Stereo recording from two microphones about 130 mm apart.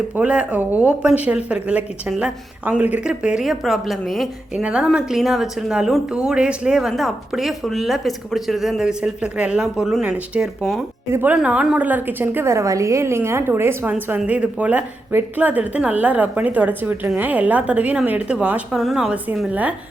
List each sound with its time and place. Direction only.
0.2 s a woman's voice: 10° right (ahead or behind)
11.1 s speech: 15° right (ahead or behind)